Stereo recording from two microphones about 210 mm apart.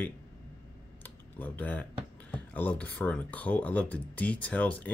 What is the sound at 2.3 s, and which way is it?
Speech, 5° left (ahead or behind).